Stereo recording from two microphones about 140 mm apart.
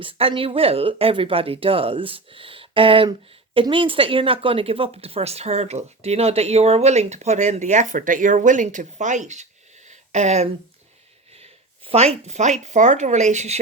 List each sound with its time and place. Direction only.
0.0 s speech: 40° right (ahead or behind); by 9.5 s 55° right (ahead or behind)
9.9 s a sound: 55° right (ahead or behind)
11.3 s speech: 45° right (ahead or behind)